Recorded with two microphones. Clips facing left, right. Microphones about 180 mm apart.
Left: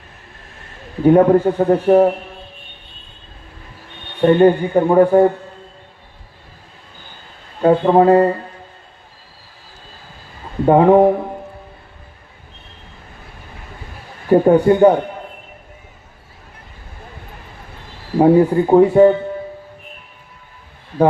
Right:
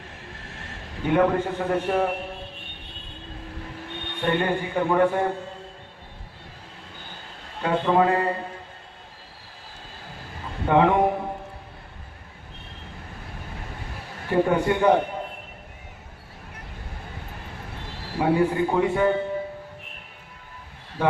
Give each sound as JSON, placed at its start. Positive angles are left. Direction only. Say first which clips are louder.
{"t": 1.0, "sound": "a man's voice", "louder": "left 10 dB", "side_deg": 40}
{"t": 4.2, "sound": "a man's voice", "louder": "left 13 dB", "side_deg": 40}
{"t": 7.6, "sound": "a man's voice", "louder": "left 9 dB", "side_deg": 40}
{"t": 10.7, "sound": "a man's voice", "louder": "left 9 dB", "side_deg": 40}
{"t": 14.3, "sound": "a man's voice", "louder": "left 10 dB", "side_deg": 40}
{"t": 18.2, "sound": "a man's voice", "louder": "left 9 dB", "side_deg": 40}